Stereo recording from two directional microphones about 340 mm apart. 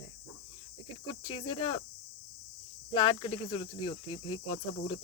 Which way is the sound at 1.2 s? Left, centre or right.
Centre.